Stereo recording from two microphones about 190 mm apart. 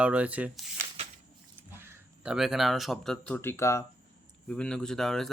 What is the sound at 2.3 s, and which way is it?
Speech, centre (ahead or behind).